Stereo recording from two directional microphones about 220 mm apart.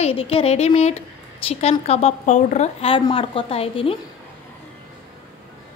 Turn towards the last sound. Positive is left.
turn(degrees=25)  # may be behind; listen again after turning